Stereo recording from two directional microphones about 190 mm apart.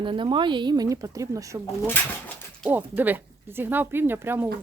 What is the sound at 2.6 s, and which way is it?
Speech, 10° right (ahead or behind).